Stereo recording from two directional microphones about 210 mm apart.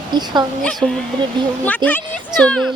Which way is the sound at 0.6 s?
5° left (ahead or behind).